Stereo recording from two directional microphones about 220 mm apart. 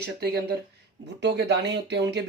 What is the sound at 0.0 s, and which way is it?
Speech, 45° right (ahead or behind).